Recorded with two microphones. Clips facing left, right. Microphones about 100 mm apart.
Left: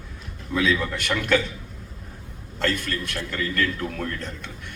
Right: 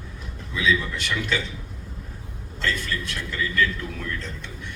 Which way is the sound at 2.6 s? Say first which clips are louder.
Left 2 dB; 50° left (ahead or behind).